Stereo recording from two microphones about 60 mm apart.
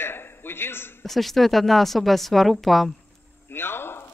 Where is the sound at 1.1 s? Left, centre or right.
Centre.